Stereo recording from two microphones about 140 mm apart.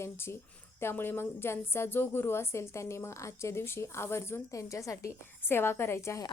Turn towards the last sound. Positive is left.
turn(degrees=20)  # may be behind; listen again after turning